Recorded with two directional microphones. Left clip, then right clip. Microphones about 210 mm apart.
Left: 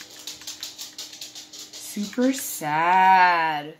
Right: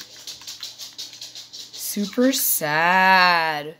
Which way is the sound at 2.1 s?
50° right (ahead or behind).